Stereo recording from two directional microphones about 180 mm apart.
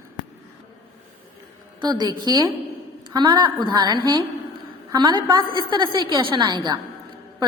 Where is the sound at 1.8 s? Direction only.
25° right (ahead or behind).